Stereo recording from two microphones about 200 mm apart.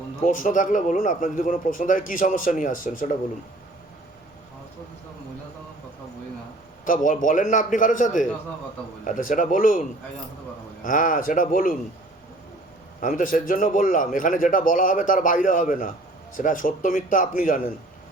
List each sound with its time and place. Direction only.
0.3 s speech: 40° left (ahead or behind)
6.8 s speech: 40° left (ahead or behind)
10.8 s speech: 40° left (ahead or behind)
13.0 s speech: 40° left (ahead or behind)